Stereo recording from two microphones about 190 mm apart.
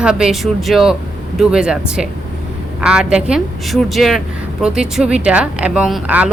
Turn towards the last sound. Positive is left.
turn(degrees=-5)  # may be behind; listen again after turning